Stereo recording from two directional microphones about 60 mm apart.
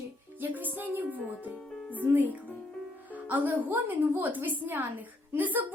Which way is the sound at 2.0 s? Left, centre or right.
Right.